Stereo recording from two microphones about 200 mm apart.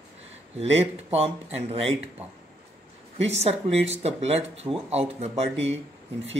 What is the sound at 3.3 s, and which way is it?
Speech, 30° right (ahead or behind).